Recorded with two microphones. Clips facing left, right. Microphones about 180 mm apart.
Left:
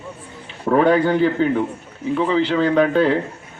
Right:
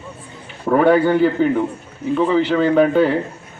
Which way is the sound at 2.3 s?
5° right (ahead or behind).